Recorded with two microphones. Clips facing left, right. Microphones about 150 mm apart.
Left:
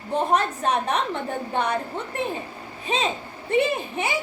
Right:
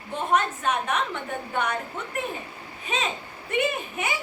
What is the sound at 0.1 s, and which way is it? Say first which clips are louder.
A woman's voice: left 3 dB; 35° left (ahead or behind).